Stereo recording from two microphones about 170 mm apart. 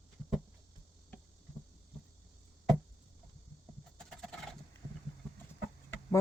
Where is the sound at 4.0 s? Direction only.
Centre (ahead or behind).